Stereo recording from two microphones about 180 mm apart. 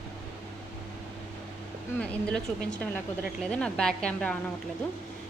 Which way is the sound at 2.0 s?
5° left (ahead or behind).